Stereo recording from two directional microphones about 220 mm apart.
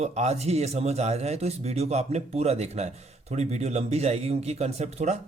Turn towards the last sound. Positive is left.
turn(degrees=-30)  # may be behind; listen again after turning